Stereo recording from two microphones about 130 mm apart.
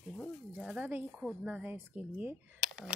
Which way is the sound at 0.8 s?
15° right (ahead or behind).